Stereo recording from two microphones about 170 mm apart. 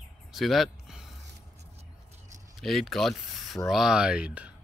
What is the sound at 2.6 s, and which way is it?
Speech, centre (ahead or behind).